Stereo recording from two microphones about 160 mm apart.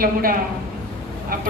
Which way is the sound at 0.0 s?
65° right (ahead or behind).